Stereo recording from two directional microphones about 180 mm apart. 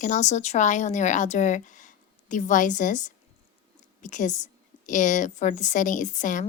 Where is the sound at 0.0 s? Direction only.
40° left (ahead or behind).